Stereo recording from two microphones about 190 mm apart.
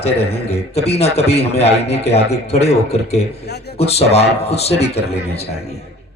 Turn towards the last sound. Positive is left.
turn(degrees=35)  # may be behind; listen again after turning